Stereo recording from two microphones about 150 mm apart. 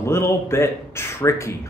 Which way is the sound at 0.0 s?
15° left (ahead or behind).